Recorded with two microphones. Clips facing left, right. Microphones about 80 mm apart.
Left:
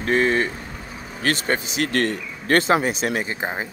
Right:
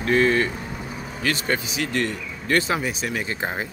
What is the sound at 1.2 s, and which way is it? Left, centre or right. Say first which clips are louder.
Speech: left 2 dB; left.